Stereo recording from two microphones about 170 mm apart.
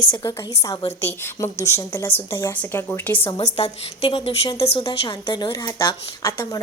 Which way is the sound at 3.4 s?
35° left (ahead or behind).